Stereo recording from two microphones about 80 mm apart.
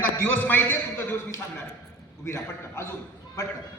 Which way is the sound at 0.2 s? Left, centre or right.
Left.